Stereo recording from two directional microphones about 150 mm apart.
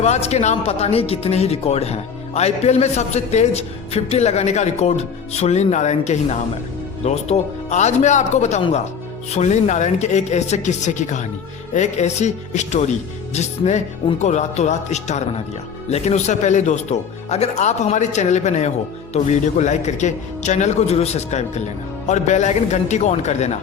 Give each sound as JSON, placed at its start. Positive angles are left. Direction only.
{"t": 0.0, "sound": "speech", "side_deg": 45}